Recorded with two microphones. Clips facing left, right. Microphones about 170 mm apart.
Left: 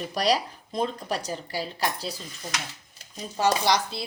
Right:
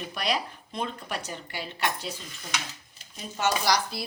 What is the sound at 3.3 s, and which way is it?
Chopping, 30° left (ahead or behind).